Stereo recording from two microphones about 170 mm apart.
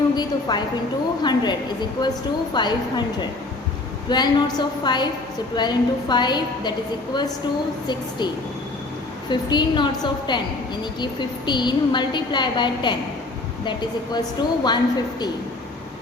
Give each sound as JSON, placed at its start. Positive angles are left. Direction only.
{"t": 0.2, "sound": "a woman's voice", "side_deg": 25}
{"t": 4.1, "sound": "a woman's voice", "side_deg": 25}
{"t": 9.3, "sound": "a woman's voice", "side_deg": 25}